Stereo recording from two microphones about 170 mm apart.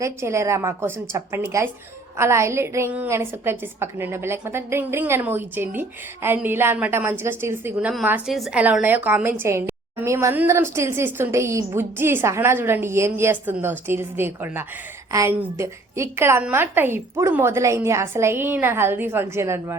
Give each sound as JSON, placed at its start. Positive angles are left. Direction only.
{"t": 0.0, "sound": "a woman's voice", "side_deg": -15}